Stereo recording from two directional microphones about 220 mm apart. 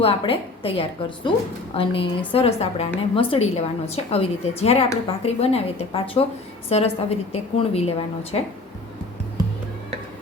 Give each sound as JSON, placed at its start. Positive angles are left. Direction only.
{"t": 0.0, "sound": "a woman's voice", "side_deg": 25}